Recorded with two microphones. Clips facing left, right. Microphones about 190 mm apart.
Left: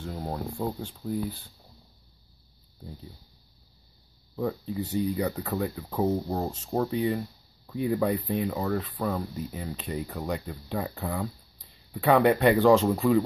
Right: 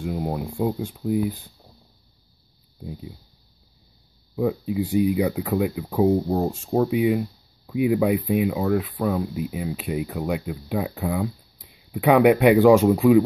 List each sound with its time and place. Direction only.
0.0 s speech: 10° right (ahead or behind)
2.8 s speech: 10° right (ahead or behind)
4.4 s speech: 10° right (ahead or behind)